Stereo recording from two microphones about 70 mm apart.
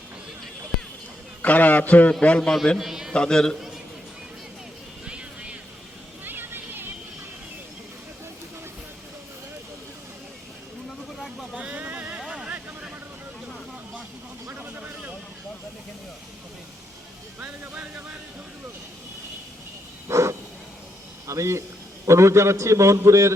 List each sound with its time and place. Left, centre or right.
1.4 s a man's voice: left
2.7 s a man's voice: centre
3.1 s a man's voice: centre
5.0 s music: centre
6.2 s music: right
11.5 s a sound: centre
14.5 s vehicle: right
17.4 s music: right
20.1 s a sound: right
22.0 s a man's voice: right